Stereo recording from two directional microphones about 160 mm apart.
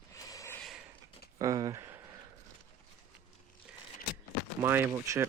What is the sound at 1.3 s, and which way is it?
Speech, 20° right (ahead or behind).